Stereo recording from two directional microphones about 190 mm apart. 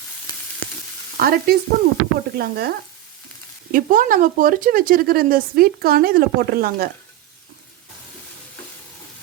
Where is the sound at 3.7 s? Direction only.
45° right (ahead or behind).